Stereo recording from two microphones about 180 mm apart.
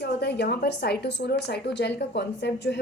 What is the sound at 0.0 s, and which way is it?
A woman's voice, 70° left (ahead or behind).